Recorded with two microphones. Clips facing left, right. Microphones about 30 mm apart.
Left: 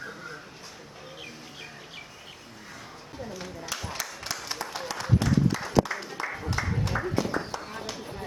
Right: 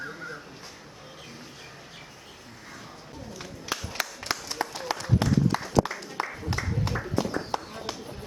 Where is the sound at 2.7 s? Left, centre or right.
Centre.